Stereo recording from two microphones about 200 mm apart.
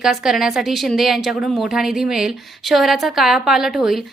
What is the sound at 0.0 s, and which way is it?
A woman's voice, centre (ahead or behind).